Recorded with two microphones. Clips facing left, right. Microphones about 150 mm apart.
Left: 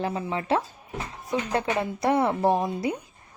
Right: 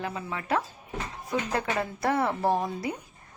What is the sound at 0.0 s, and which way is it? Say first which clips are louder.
A woman's voice: left 5 dB; 30° left (ahead or behind).